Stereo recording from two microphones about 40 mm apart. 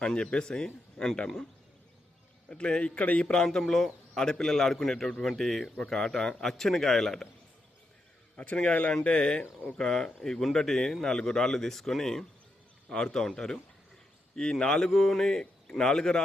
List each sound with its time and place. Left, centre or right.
0.0 s a man's voice: left
2.5 s a man's voice: left
3.3 s a man's voice: centre
8.4 s a man's voice: left; by 13.3 s centre
14.6 s a man's voice: centre